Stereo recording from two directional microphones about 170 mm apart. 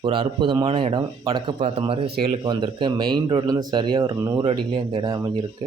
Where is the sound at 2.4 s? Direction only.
25° right (ahead or behind).